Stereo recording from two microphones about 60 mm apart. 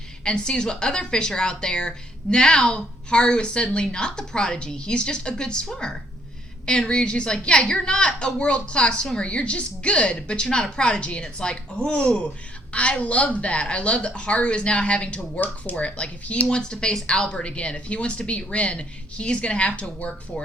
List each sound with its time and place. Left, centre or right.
0.3 s a woman's voice: centre